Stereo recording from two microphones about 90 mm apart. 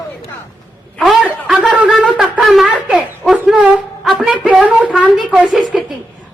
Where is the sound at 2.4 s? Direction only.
Centre (ahead or behind).